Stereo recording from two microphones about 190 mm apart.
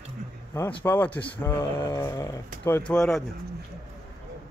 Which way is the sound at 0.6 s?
10° left (ahead or behind).